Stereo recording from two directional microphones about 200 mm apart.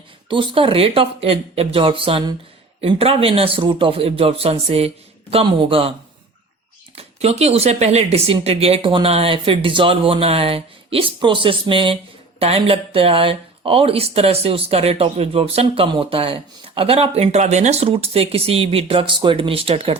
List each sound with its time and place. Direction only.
0.3 s speech: 25° right (ahead or behind)
6.9 s speech: 30° right (ahead or behind)